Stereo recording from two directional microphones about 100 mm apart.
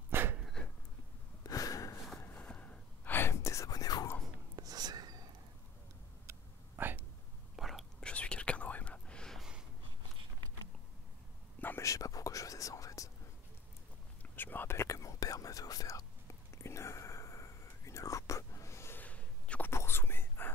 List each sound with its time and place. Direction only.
0.1 s a sound: 20° right (ahead or behind)
1.4 s a sound: 35° left (ahead or behind)
2.3 s whispering: 15° left (ahead or behind); by 4.1 s 35° left (ahead or behind)
4.6 s whispering: 40° right (ahead or behind)
6.8 s hiccup: 20° right (ahead or behind)
7.5 s whispering: centre (ahead or behind)
8.1 s whispering: 10° left (ahead or behind)
9.4 s snort: 5° right (ahead or behind)
11.6 s whispering: 25° left (ahead or behind)
11.9 s whispering: 35° left (ahead or behind)
14.3 s whispering: 20° left (ahead or behind)
19.7 s whispering: 25° left (ahead or behind)